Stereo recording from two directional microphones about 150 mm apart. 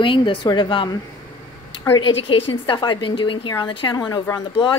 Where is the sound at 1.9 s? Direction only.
35° left (ahead or behind).